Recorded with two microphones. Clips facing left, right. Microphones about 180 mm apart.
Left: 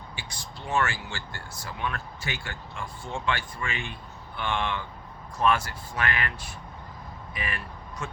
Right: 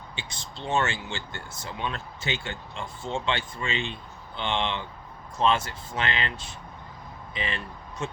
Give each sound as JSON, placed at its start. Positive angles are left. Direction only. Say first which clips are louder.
{"t": 0.2, "sound": "speech", "louder": "right 5 dB", "side_deg": -25}